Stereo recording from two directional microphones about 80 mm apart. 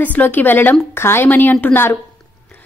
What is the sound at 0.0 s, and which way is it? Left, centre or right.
Speech, left.